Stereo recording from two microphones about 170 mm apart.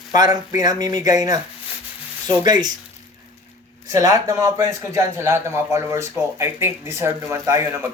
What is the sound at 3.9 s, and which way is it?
A man's voice, 20° right (ahead or behind).